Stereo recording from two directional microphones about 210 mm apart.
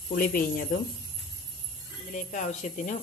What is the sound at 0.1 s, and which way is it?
Speech, 45° left (ahead or behind).